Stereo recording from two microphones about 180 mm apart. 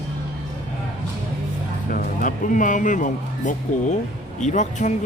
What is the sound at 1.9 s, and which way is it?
A man's voice, 50° left (ahead or behind).